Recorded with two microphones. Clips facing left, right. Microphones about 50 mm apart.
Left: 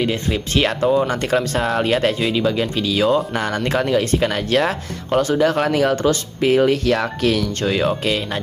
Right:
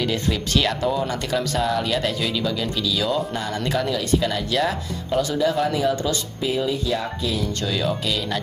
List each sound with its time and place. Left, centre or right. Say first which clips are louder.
0.0 s speech: left 3 dB; left
2.1 s speech: left 5 dB; left
7.6 s speech: left 6 dB; left